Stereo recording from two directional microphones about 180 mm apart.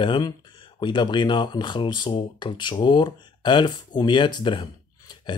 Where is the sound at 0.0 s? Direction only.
25° left (ahead or behind).